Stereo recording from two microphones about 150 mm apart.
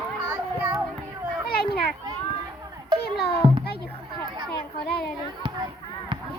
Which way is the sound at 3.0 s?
90° left.